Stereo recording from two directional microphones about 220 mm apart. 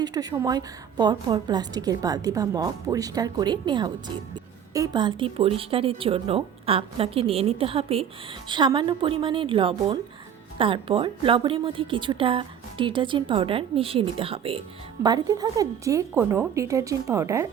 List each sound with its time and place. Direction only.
0.0 s a woman's voice: 15° right (ahead or behind)